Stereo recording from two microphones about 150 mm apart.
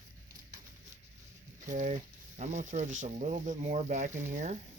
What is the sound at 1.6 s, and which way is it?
Speech, 55° right (ahead or behind).